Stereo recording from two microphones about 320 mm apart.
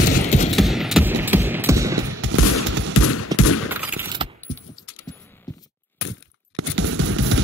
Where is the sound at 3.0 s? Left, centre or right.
Left.